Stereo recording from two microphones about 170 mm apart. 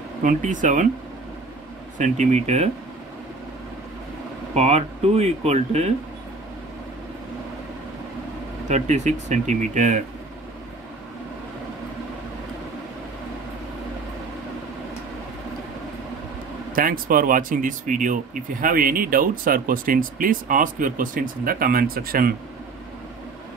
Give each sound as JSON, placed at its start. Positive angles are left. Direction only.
{"t": 0.2, "sound": "speech", "side_deg": -50}
{"t": 2.0, "sound": "speech", "side_deg": -45}
{"t": 4.6, "sound": "speech", "side_deg": -40}
{"t": 8.6, "sound": "speech", "side_deg": -45}
{"t": 16.7, "sound": "speech", "side_deg": -55}